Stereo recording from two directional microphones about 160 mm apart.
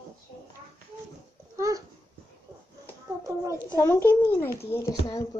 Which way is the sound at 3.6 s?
15° left (ahead or behind).